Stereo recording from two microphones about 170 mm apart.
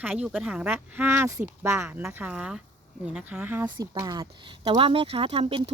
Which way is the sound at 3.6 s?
25° right (ahead or behind).